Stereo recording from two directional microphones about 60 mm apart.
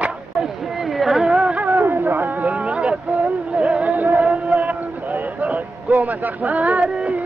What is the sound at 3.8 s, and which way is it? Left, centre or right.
Music, right.